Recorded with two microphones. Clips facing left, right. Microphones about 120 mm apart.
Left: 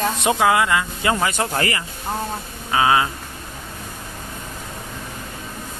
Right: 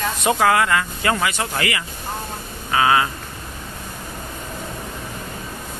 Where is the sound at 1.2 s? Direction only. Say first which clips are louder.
Left 2 dB; 35° left (ahead or behind).